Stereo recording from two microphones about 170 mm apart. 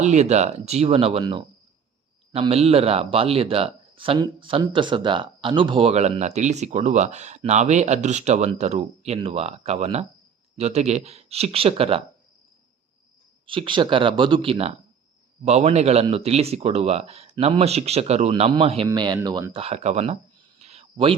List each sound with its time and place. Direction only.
0.0 s speech: 40° right (ahead or behind)
13.5 s speech: 30° right (ahead or behind)
18.9 s speech: 25° right (ahead or behind)
19.6 s speech: 40° right (ahead or behind)
20.6 s a sound: 35° right (ahead or behind)